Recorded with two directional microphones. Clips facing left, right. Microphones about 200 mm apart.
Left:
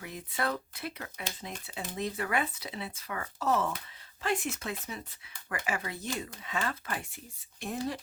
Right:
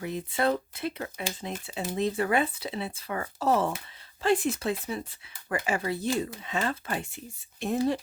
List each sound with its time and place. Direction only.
0.0 s speech: 25° right (ahead or behind)